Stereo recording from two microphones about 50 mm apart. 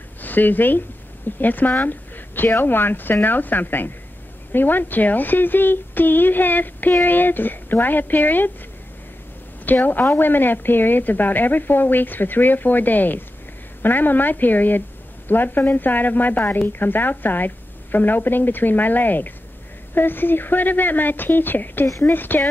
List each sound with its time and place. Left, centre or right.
0.2 s a woman's voice: left
1.8 s a sound: left
2.5 s a woman's voice: left
9.7 s a woman's voice: left